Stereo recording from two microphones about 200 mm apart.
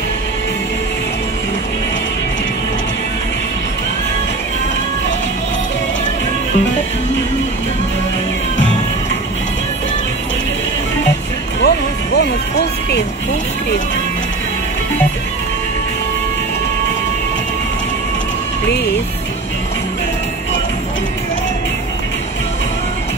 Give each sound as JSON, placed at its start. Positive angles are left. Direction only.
{"t": 11.6, "sound": "music", "side_deg": 55}
{"t": 12.2, "sound": "speech", "side_deg": 55}